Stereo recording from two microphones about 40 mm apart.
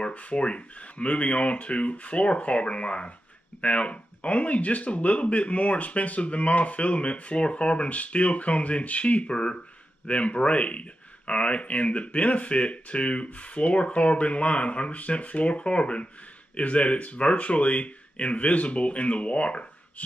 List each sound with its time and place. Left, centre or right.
0.1 s speech: left